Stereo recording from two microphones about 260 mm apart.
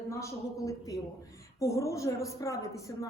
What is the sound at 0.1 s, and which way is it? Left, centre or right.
Speech, centre.